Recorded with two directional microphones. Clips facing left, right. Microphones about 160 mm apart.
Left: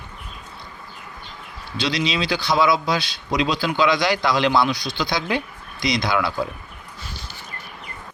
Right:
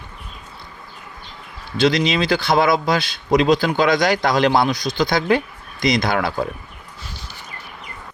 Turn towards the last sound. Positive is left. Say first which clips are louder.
# right 2 dB
turn(degrees=-50)  # may be behind; listen again after turning